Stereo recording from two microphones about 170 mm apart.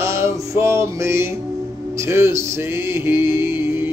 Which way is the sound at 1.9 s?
15° right (ahead or behind).